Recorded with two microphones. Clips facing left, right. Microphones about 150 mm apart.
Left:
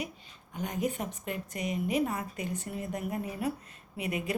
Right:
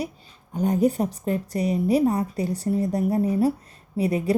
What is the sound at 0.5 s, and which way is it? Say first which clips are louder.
Speech: right 11 dB; 35° right (ahead or behind).